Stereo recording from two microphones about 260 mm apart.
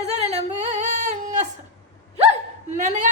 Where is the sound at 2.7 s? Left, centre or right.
Right.